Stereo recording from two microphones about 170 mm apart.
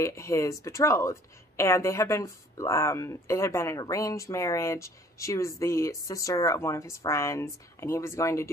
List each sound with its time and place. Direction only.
0.0 s speech: 15° left (ahead or behind)